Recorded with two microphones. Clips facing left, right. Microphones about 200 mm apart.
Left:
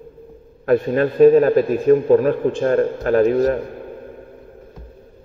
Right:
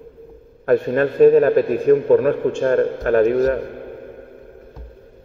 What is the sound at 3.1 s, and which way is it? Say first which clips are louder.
Speech: even; 35° left (ahead or behind).